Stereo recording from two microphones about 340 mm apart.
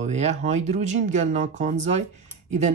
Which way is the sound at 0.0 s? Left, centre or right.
Centre.